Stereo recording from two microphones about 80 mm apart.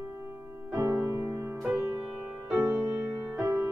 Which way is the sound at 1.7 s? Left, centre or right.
Right.